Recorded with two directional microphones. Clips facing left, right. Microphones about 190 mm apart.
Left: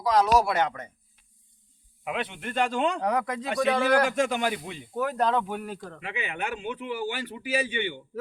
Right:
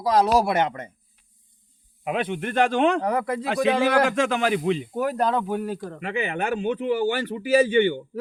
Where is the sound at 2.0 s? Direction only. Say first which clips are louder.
Right 6 dB; 50° right (ahead or behind).